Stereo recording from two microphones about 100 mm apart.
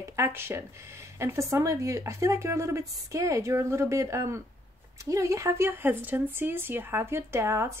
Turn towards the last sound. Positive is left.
turn(degrees=-25)  # may be behind; listen again after turning